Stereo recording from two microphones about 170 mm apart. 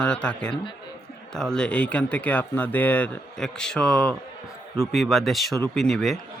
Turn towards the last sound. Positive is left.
turn(degrees=0)  # may be behind; listen again after turning